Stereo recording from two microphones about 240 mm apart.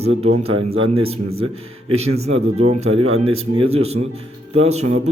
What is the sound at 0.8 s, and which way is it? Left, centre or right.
A man's voice, right.